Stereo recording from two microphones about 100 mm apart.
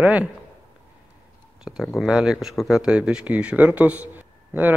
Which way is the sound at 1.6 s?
5° right (ahead or behind).